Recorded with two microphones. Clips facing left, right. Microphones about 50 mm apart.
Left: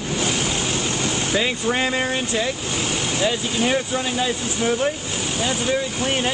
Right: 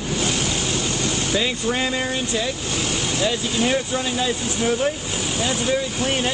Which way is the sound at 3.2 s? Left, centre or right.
Centre.